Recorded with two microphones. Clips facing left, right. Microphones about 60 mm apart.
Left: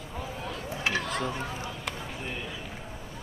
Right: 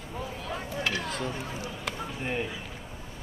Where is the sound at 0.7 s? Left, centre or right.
Left.